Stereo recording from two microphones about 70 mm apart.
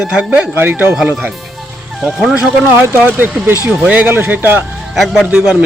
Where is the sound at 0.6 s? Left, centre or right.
Right.